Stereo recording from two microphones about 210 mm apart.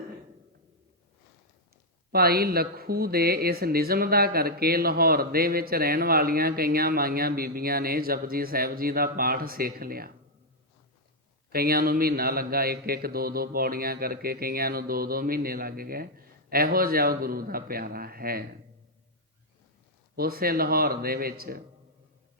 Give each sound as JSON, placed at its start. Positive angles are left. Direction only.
{"t": 2.1, "sound": "speech", "side_deg": -45}
{"t": 11.5, "sound": "speech", "side_deg": -45}
{"t": 20.1, "sound": "speech", "side_deg": -45}